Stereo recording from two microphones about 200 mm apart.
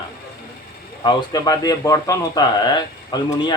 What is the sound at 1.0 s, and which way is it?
Speech, 20° left (ahead or behind).